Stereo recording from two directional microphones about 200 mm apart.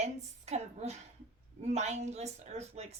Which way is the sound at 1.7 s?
35° right (ahead or behind).